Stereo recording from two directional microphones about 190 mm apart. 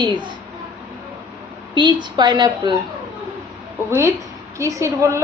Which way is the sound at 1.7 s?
25° right (ahead or behind).